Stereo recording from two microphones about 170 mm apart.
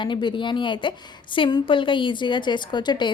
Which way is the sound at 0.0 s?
30° left (ahead or behind).